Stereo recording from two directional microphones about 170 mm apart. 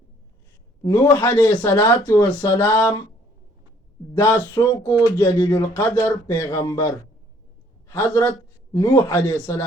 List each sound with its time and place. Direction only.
0.8 s a man's voice: 20° left (ahead or behind)
4.1 s a man's voice: 10° left (ahead or behind)
7.9 s a man's voice: 15° left (ahead or behind)